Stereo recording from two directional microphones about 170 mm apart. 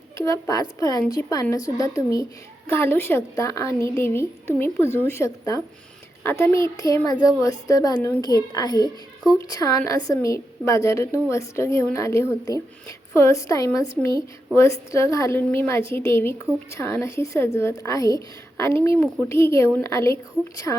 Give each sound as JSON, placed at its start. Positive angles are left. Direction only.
{"t": 0.3, "sound": "a woman's voice", "side_deg": 20}